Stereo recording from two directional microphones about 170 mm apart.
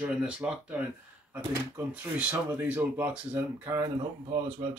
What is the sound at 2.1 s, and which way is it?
Speech, 10° right (ahead or behind).